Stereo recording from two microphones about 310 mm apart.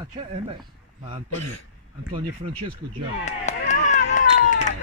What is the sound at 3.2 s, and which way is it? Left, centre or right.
Chop, left.